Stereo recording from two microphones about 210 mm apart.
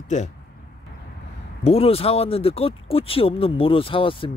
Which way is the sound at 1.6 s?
30° left (ahead or behind).